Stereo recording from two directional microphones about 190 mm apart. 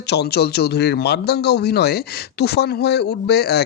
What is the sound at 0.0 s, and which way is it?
A man's voice, 60° left (ahead or behind).